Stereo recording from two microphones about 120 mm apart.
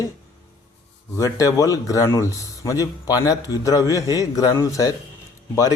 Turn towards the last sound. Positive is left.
turn(degrees=30)  # may be behind; listen again after turning